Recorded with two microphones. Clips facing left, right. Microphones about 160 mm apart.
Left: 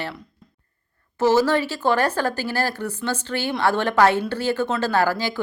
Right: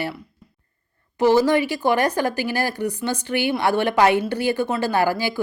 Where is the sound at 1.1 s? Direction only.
15° right (ahead or behind).